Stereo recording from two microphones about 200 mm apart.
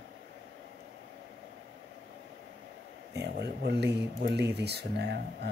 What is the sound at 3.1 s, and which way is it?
Speech, 55° right (ahead or behind).